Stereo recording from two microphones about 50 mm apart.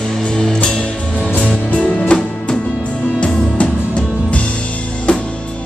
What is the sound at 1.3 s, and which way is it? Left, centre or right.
Music, left.